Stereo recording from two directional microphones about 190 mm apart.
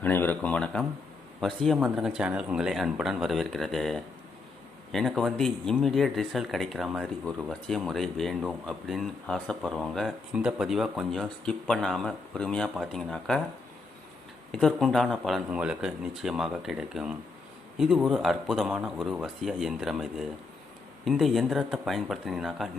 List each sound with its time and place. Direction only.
0.0 s speech: 10° left (ahead or behind)
14.5 s speech: centre (ahead or behind)